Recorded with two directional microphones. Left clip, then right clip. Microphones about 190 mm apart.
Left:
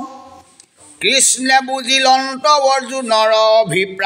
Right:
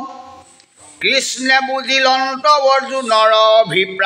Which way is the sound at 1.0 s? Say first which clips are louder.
Left 1 dB; 45° left (ahead or behind).